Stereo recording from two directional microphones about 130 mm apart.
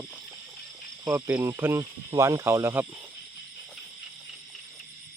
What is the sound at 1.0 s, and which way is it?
Speech, 25° right (ahead or behind).